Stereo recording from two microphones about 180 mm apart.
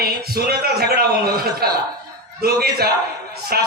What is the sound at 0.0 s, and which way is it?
A man's voice, 60° right (ahead or behind).